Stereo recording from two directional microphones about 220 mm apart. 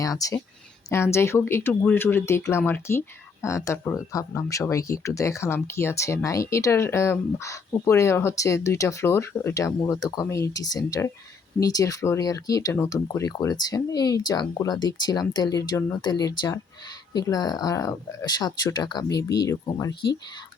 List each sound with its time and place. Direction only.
0.0 s speech: 15° left (ahead or behind)